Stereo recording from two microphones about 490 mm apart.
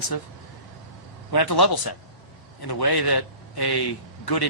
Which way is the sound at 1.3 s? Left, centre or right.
Left.